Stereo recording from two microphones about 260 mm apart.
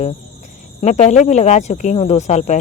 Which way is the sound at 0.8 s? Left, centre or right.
Left.